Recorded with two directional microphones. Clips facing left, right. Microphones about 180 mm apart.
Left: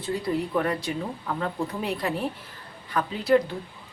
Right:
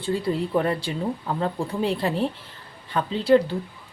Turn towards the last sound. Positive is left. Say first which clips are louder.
# right 3 dB
turn(degrees=-30)  # may be behind; listen again after turning